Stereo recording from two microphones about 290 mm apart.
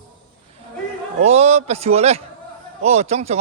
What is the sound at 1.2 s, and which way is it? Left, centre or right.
A man's voice, right.